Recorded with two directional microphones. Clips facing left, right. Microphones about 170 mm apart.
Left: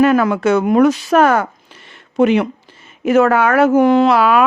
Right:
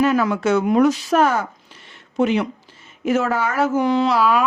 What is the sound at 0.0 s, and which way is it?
Speech, 60° left (ahead or behind).